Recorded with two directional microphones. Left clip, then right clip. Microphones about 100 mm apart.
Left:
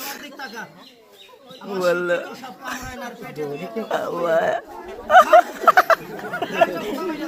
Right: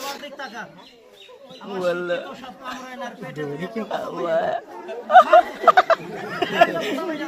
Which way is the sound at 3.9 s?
25° left (ahead or behind).